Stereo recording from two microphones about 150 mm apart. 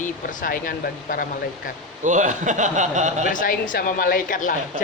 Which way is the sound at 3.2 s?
65° left (ahead or behind).